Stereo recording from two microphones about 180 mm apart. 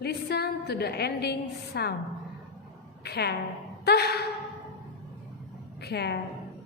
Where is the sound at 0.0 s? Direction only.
60° left (ahead or behind).